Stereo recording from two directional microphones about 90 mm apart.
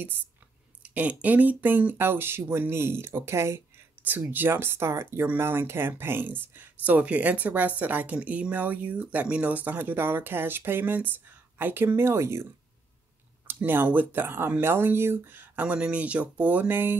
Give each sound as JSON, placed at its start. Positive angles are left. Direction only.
{"t": 0.8, "sound": "speech", "side_deg": -15}
{"t": 13.5, "sound": "speech", "side_deg": -25}